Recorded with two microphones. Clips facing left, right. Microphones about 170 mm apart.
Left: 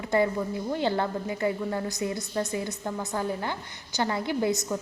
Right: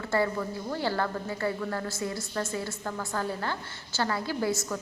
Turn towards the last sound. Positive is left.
turn(degrees=20)  # may be behind; listen again after turning